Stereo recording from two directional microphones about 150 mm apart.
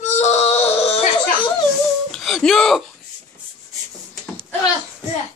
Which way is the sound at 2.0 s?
Centre (ahead or behind).